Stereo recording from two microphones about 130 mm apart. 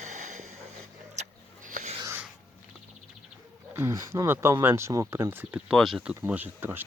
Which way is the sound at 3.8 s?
20° right (ahead or behind).